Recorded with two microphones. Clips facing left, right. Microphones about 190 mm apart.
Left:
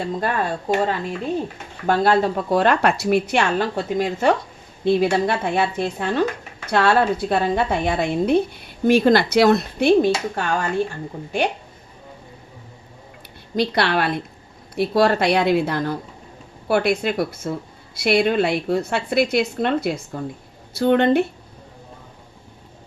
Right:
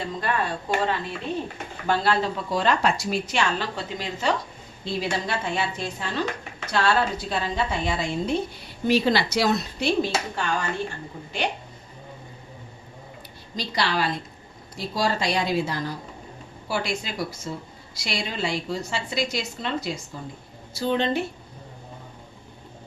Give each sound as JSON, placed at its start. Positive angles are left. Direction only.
{"t": 0.2, "sound": "a woman's voice", "side_deg": 45}
{"t": 13.6, "sound": "a woman's voice", "side_deg": 60}